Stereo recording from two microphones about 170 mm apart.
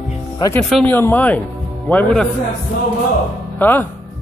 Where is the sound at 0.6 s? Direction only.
5° left (ahead or behind).